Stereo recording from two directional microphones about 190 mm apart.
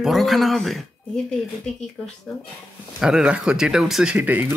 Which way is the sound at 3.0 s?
5° right (ahead or behind).